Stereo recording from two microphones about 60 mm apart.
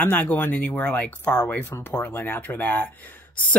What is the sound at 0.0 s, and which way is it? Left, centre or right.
Speech, left.